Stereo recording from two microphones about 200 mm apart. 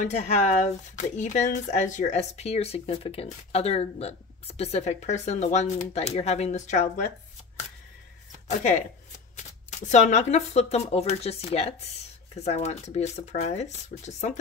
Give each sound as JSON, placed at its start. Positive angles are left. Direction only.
{"t": 0.0, "sound": "speech", "side_deg": 35}
{"t": 8.5, "sound": "speech", "side_deg": 35}